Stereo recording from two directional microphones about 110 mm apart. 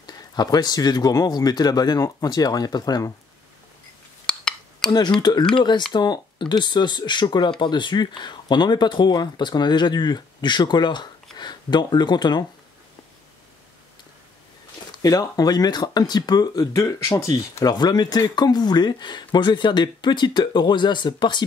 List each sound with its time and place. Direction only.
0.0 s speech: 40° left (ahead or behind)
4.3 s a sound: 5° left (ahead or behind)
5.2 s speech: 40° left (ahead or behind)
14.9 s speech: 35° left (ahead or behind)